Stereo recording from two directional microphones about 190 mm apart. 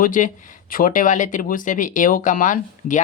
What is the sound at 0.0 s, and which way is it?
Speech, 45° left (ahead or behind).